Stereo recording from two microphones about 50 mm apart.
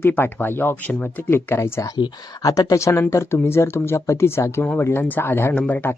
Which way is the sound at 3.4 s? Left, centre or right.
Left.